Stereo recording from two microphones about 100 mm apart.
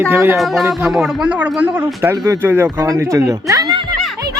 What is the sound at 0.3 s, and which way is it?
Speech, centre (ahead or behind).